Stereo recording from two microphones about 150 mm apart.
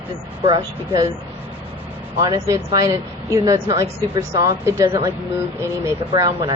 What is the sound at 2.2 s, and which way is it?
Speech, 25° right (ahead or behind).